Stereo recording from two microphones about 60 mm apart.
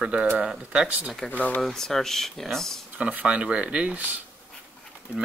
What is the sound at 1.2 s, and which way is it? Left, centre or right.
Speech, left.